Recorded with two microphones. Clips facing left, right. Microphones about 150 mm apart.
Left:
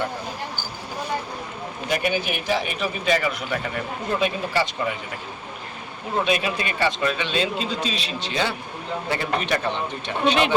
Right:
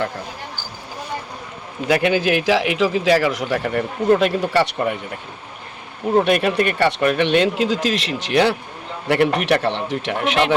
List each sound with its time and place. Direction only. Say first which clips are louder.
1.9 s a man's voice: right 8 dB; 90° right; by 4.9 s 65° right (ahead or behind)
6.1 s speech: right 7 dB; 60° right (ahead or behind); by 10.3 s 90° right